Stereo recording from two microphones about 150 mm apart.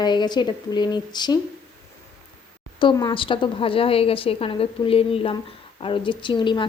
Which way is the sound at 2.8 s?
30° left (ahead or behind).